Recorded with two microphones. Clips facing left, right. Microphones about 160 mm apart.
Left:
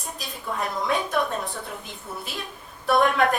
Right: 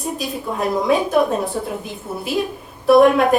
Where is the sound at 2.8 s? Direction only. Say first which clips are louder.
Right 9 dB; 5° right (ahead or behind).